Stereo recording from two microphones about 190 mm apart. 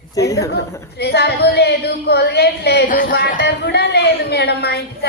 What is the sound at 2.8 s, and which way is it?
Speech, 45° left (ahead or behind).